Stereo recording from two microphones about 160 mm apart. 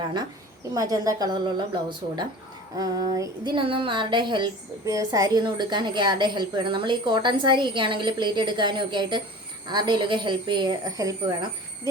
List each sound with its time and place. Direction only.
0.7 s a woman's voice: 20° right (ahead or behind)